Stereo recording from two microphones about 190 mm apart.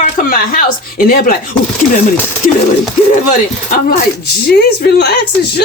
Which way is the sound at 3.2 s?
50° left (ahead or behind).